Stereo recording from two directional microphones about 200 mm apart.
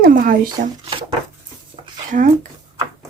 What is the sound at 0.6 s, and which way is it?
Speech, 45° right (ahead or behind).